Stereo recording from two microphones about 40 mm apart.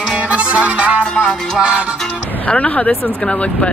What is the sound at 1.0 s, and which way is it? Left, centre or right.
Music, left.